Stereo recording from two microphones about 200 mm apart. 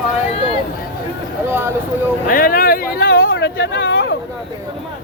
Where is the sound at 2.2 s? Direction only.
45° left (ahead or behind); by 4.1 s 60° left (ahead or behind).